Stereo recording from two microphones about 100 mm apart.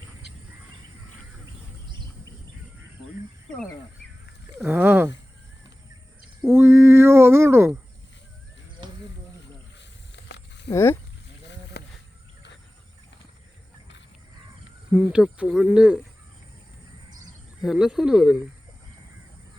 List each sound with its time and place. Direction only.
4.6 s speech: 20° right (ahead or behind)
6.5 s a sound: 25° right (ahead or behind)
10.7 s speech: 25° left (ahead or behind)
14.9 s speech: 10° right (ahead or behind)
17.6 s speech: 5° right (ahead or behind)